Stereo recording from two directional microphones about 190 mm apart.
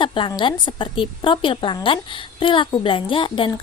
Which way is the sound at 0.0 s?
25° left (ahead or behind).